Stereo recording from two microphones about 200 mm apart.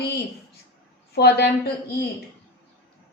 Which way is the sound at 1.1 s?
55° left (ahead or behind).